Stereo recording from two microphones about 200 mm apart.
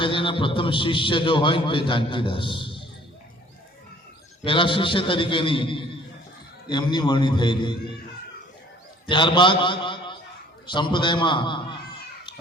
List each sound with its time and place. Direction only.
0.0 s a man's voice: 25° left (ahead or behind)
4.4 s a man's voice: 25° left (ahead or behind)
9.0 s a man's voice: 25° left (ahead or behind)